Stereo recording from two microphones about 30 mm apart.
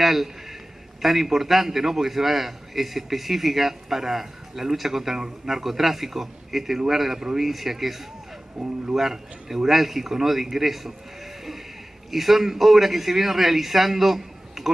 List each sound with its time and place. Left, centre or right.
0.0 s a sound: centre
1.0 s a man's voice: centre
8.5 s speech: right
8.9 s a man's voice: centre
12.1 s a man's voice: centre